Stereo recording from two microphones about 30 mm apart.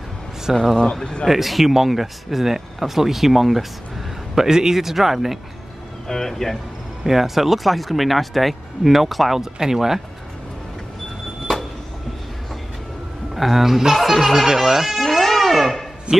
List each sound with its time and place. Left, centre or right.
0.5 s speech: centre
4.4 s speech: centre
6.0 s speech: centre
7.1 s speech: centre
9.4 s speech: centre
13.3 s speech: centre
15.0 s a sound: centre
16.1 s a man's voice: right